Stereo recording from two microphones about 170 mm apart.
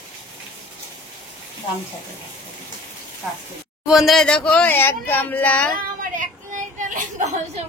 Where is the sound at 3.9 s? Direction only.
Centre (ahead or behind).